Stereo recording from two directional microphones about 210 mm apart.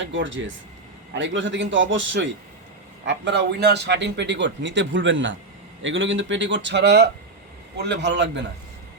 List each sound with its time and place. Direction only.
0.0 s a man's voice: 60° right (ahead or behind)